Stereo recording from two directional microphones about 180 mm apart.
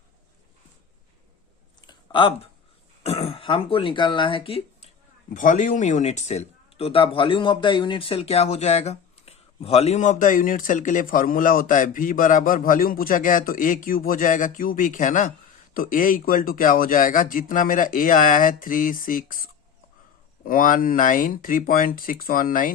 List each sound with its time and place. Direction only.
1.8 s a sound: 25° left (ahead or behind)
3.0 s speech: 35° left (ahead or behind)
5.3 s speech: 45° left (ahead or behind)